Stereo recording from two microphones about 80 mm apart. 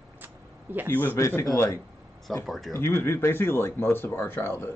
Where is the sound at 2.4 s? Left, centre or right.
Centre.